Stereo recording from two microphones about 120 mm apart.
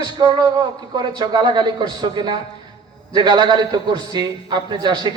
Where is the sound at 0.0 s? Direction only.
35° right (ahead or behind).